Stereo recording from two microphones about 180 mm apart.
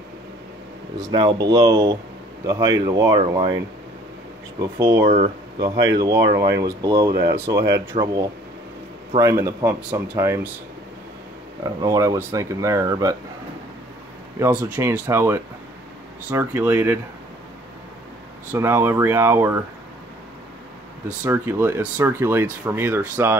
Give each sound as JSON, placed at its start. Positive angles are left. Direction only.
{"t": 0.9, "sound": "speech", "side_deg": -20}
{"t": 5.0, "sound": "speech", "side_deg": -40}
{"t": 6.0, "sound": "speech", "side_deg": -20}
{"t": 7.1, "sound": "speech", "side_deg": -60}
{"t": 7.3, "sound": "speech", "side_deg": -15}
{"t": 11.6, "sound": "speech", "side_deg": -20}
{"t": 14.4, "sound": "speech", "side_deg": -10}
{"t": 18.5, "sound": "speech", "side_deg": -15}
{"t": 21.2, "sound": "speech", "side_deg": -15}